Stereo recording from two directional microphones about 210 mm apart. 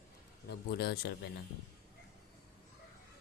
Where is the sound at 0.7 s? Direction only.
50° left (ahead or behind).